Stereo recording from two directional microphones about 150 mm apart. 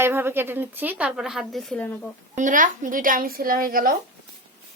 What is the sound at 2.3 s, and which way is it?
A woman's voice, 60° right (ahead or behind).